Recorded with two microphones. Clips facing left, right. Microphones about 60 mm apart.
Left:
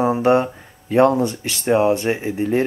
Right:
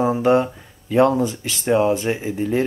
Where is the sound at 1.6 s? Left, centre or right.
Centre.